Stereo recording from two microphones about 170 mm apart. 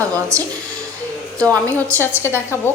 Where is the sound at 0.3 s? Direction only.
15° right (ahead or behind).